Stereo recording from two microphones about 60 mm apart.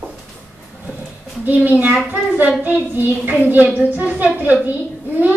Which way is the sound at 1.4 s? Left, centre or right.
Right.